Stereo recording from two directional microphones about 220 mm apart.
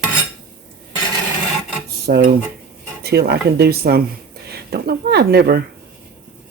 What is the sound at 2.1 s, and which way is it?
Speech, 40° right (ahead or behind).